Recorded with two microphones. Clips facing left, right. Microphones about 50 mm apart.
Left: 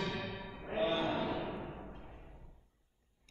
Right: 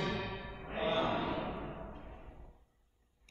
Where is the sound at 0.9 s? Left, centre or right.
Right.